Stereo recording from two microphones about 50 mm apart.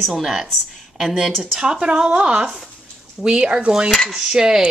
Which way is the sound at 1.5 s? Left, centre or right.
Right.